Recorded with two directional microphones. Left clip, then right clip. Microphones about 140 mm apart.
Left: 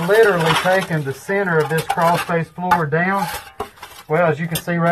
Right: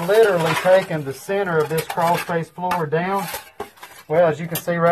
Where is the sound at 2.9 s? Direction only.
20° right (ahead or behind).